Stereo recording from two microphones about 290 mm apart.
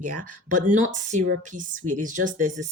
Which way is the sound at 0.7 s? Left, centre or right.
Right.